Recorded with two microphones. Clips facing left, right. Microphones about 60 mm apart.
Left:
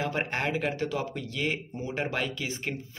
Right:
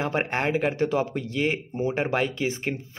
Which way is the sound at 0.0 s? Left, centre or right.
Right.